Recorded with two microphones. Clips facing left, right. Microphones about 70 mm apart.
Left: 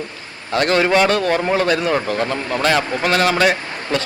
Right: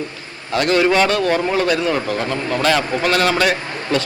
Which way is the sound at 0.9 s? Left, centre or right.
Centre.